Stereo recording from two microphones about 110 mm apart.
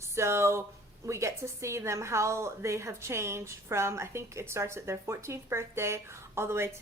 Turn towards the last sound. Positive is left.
turn(degrees=-25)  # may be behind; listen again after turning